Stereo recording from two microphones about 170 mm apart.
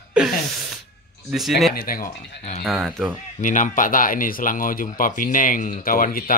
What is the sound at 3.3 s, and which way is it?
Speech, 50° left (ahead or behind).